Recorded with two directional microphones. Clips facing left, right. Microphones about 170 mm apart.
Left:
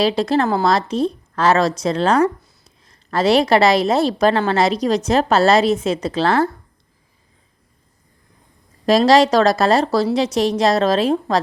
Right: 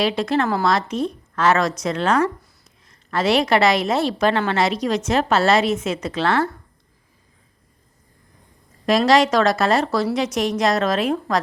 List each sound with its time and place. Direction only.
0.0 s a woman's voice: 35° left (ahead or behind)
8.9 s a woman's voice: 35° left (ahead or behind)